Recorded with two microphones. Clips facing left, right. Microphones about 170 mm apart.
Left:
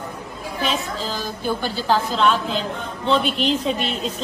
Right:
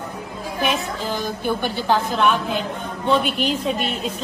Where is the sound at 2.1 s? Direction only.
15° right (ahead or behind).